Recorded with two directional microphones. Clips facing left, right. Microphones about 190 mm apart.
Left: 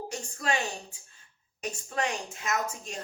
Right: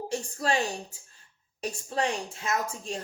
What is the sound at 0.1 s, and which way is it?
A woman's voice, 35° right (ahead or behind).